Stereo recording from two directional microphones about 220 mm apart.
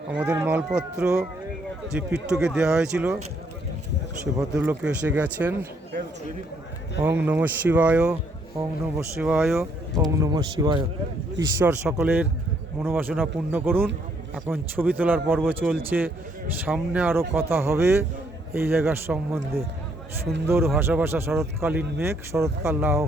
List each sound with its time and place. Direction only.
0.1 s speech: 5° right (ahead or behind)
4.5 s speech: 5° right (ahead or behind)
7.0 s speech: 10° right (ahead or behind)
10.2 s speech: 20° right (ahead or behind)
20.7 s speech: 10° right (ahead or behind)